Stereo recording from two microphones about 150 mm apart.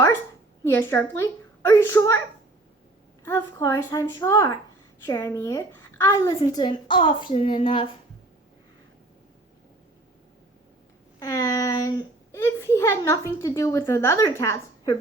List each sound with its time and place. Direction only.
0.6 s a woman's voice: 15° left (ahead or behind)
3.2 s a woman's voice: 15° left (ahead or behind); by 7.9 s 35° left (ahead or behind)
11.2 s a woman's voice: 20° left (ahead or behind)